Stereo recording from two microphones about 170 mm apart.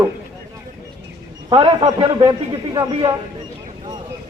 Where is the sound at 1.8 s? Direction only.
25° right (ahead or behind).